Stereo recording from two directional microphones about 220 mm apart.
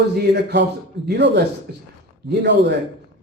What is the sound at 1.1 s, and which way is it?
Speech, 50° right (ahead or behind).